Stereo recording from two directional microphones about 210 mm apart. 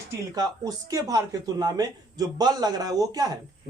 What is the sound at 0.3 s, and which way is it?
Speech, 15° right (ahead or behind).